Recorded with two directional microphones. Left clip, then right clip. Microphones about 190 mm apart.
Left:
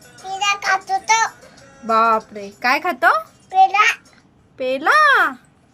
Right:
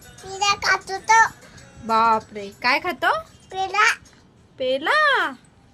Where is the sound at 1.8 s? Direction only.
15° right (ahead or behind).